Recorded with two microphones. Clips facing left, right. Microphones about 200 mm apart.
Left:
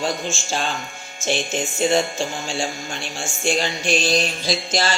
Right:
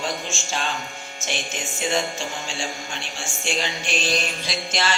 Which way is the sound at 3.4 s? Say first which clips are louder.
Left 6 dB; 40° left (ahead or behind).